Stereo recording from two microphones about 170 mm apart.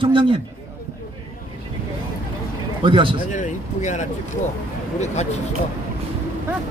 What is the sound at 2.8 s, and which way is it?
Speech, 30° right (ahead or behind).